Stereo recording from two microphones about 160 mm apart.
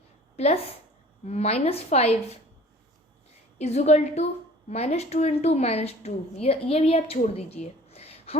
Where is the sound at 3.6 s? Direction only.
45° left (ahead or behind).